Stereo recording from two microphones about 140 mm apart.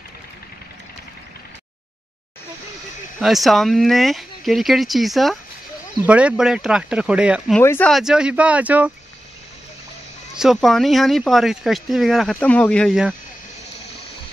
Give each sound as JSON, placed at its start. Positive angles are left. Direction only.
{"t": 3.2, "sound": "speech", "side_deg": 0}
{"t": 7.6, "sound": "speech", "side_deg": 15}
{"t": 7.9, "sound": "speech", "side_deg": -5}
{"t": 10.3, "sound": "speech", "side_deg": 0}
{"t": 12.4, "sound": "speech", "side_deg": 10}